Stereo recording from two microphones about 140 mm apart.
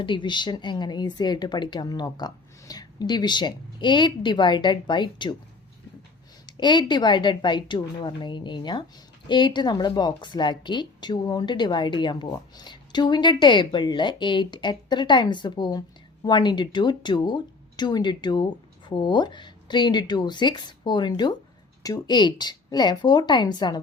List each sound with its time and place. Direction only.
0.0 s a woman's voice: 35° left (ahead or behind)
6.4 s a woman's voice: 30° left (ahead or behind)